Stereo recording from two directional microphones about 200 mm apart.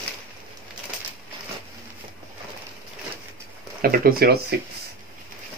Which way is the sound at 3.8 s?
50° right (ahead or behind).